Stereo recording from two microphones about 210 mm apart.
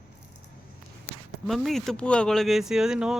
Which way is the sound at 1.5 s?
Centre (ahead or behind).